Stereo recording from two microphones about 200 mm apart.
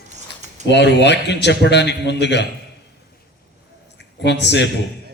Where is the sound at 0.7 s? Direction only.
60° left (ahead or behind).